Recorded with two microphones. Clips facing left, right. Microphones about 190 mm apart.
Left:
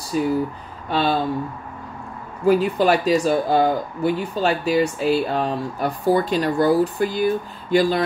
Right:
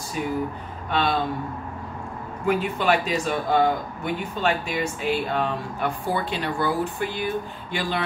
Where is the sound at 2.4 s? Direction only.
35° left (ahead or behind).